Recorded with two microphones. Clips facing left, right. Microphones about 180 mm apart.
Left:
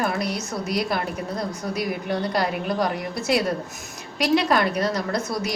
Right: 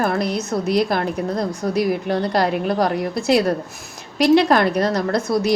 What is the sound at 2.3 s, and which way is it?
A woman's voice, 35° right (ahead or behind).